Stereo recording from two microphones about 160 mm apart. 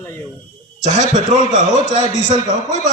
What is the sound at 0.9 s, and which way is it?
A man's voice, 45° left (ahead or behind).